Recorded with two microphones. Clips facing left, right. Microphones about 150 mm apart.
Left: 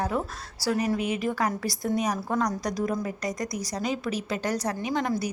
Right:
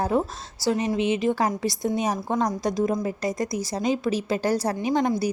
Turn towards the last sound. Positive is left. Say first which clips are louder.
# right 5 dB
turn(degrees=-30)  # may be behind; listen again after turning